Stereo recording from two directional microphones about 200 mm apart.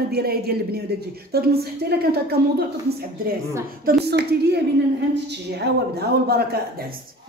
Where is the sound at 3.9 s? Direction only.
55° right (ahead or behind).